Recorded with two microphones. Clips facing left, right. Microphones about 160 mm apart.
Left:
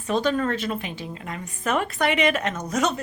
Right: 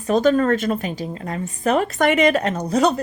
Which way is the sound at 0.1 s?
45° right (ahead or behind).